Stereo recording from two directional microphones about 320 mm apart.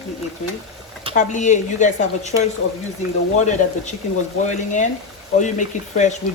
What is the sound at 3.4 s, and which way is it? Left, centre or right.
Speech, left.